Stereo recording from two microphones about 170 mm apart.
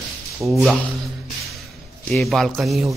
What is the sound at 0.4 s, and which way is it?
Speech, centre (ahead or behind).